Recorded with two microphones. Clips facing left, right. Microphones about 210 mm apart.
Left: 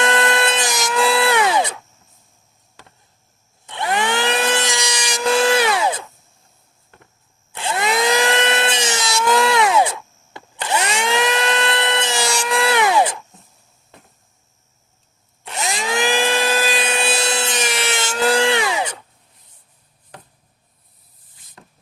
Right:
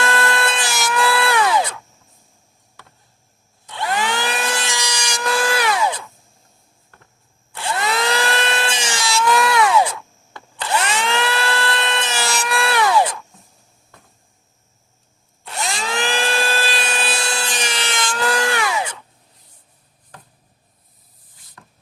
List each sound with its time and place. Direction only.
0.0 s tools: 20° left (ahead or behind)
3.7 s tools: 20° left (ahead or behind)
7.5 s tools: 20° left (ahead or behind)
15.4 s tools: 20° left (ahead or behind)
18.0 s a sound: 25° left (ahead or behind)
21.6 s rub: 25° left (ahead or behind)